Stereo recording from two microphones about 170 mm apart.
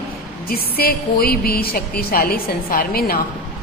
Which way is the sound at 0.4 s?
60° left (ahead or behind).